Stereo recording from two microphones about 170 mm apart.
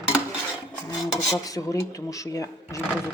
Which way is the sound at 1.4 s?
20° left (ahead or behind).